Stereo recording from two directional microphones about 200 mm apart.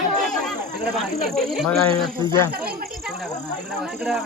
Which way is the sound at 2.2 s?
15° left (ahead or behind).